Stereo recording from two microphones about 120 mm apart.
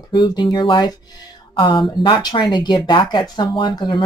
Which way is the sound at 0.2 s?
35° left (ahead or behind).